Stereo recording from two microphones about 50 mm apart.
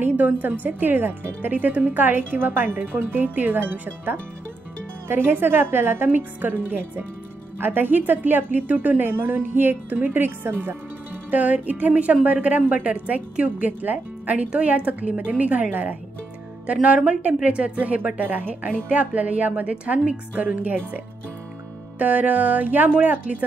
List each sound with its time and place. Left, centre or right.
0.0 s speech: right
5.0 s a woman's voice: right
11.2 s a woman's voice: right